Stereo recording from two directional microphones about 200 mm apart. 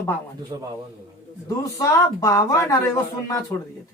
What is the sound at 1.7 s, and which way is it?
Speech, 15° left (ahead or behind).